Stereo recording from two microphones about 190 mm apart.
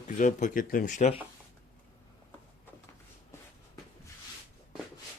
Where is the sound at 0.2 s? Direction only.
40° left (ahead or behind).